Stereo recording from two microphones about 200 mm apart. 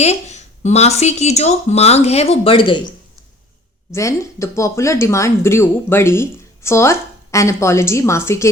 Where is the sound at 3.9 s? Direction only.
15° left (ahead or behind).